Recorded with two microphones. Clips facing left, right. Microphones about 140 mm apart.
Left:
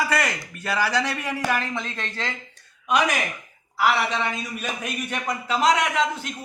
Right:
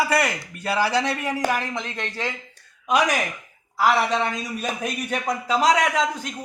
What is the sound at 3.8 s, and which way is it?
A man's voice, 40° right (ahead or behind).